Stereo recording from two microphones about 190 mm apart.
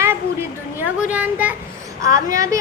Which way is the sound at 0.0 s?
10° right (ahead or behind).